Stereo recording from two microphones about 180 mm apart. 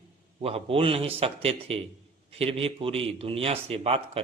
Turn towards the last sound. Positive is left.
turn(degrees=-30)  # may be behind; listen again after turning